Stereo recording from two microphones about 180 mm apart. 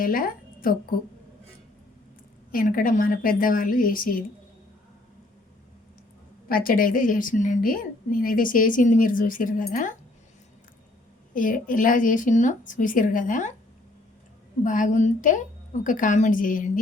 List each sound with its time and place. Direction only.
0.0 s a woman's voice: 50° left (ahead or behind)
2.5 s a woman's voice: 50° left (ahead or behind)
6.5 s a woman's voice: 55° left (ahead or behind)
11.3 s a woman's voice: 50° left (ahead or behind)
14.6 s a woman's voice: 45° left (ahead or behind)